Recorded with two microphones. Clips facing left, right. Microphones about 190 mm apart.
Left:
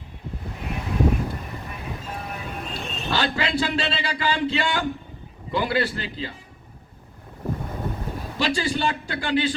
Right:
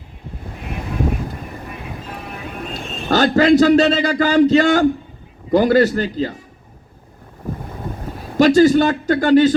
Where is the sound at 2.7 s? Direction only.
45° right (ahead or behind).